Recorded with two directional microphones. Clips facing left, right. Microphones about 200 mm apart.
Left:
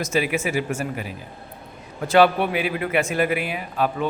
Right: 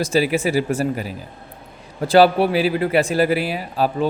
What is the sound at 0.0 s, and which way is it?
A man's voice, 35° right (ahead or behind).